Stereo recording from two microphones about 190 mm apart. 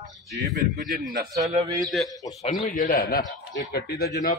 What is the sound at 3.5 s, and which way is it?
Speech, 65° left (ahead or behind).